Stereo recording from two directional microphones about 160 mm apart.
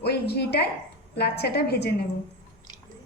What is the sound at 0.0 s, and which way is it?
A woman's voice, 90° left.